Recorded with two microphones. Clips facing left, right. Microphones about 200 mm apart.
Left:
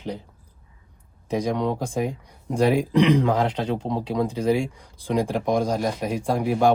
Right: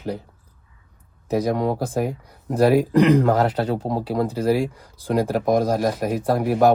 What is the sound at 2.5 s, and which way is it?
Speech, 5° right (ahead or behind).